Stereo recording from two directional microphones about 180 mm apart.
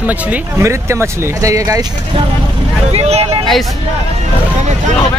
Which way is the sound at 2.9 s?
35° right (ahead or behind).